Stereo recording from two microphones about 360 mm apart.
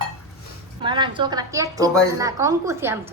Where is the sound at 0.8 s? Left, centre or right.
Centre.